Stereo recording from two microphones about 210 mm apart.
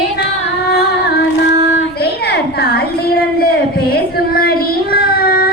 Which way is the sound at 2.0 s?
50° left (ahead or behind).